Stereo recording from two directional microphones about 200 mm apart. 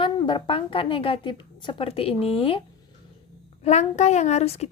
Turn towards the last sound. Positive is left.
turn(degrees=30)  # may be behind; listen again after turning